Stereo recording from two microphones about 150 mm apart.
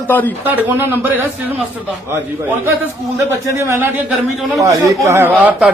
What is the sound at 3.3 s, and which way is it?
A man's voice, 15° right (ahead or behind).